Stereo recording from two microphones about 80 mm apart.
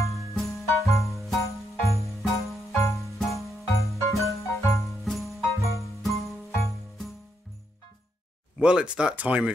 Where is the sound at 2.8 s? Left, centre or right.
Left.